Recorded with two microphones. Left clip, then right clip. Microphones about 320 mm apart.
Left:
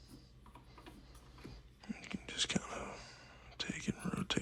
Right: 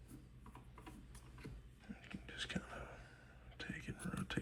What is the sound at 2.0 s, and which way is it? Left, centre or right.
Whispering, centre.